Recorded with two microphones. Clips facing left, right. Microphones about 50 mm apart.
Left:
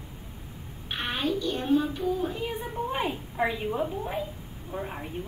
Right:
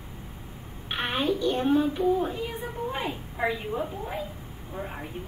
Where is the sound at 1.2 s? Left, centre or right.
Right.